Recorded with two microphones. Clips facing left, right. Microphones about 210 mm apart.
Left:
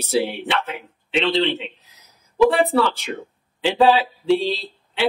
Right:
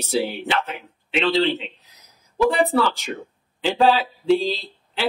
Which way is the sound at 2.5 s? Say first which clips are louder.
Left 1 dB; centre (ahead or behind).